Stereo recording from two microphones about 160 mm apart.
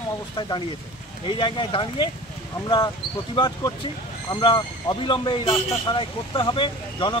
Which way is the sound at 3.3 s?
30° left (ahead or behind).